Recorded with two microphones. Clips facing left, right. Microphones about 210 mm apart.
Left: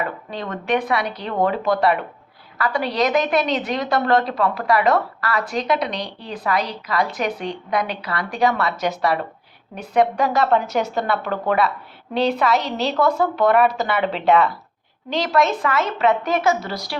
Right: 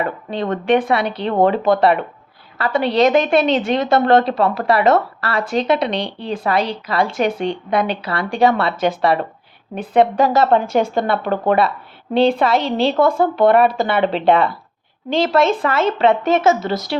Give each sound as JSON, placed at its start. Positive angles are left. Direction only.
{"t": 0.5, "sound": "a woman's voice", "side_deg": -25}
{"t": 9.7, "sound": "a woman's voice", "side_deg": -25}